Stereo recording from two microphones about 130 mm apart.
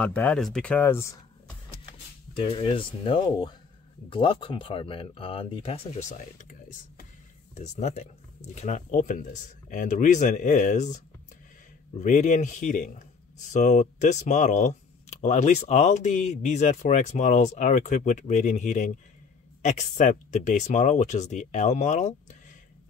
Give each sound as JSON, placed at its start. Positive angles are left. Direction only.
{"t": 0.0, "sound": "speech", "side_deg": 10}
{"t": 2.3, "sound": "speech", "side_deg": 45}
{"t": 6.0, "sound": "speech", "side_deg": 65}
{"t": 7.5, "sound": "speech", "side_deg": 60}
{"t": 12.0, "sound": "speech", "side_deg": 75}
{"t": 13.5, "sound": "speech", "side_deg": 65}